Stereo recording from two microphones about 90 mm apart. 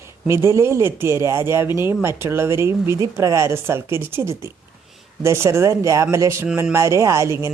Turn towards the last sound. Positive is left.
turn(degrees=-30)  # may be behind; listen again after turning